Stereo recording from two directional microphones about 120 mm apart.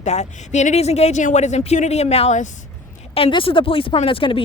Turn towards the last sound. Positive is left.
turn(degrees=45)  # may be behind; listen again after turning